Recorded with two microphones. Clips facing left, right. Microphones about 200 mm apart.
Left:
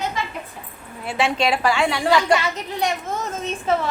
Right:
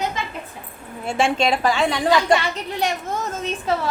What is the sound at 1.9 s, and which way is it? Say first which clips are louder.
Speech: right 1 dB; 20° right (ahead or behind).